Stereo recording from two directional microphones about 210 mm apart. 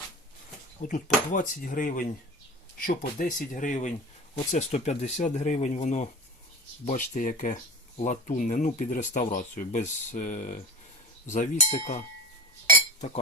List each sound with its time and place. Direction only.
0.8 s speech: 35° left (ahead or behind)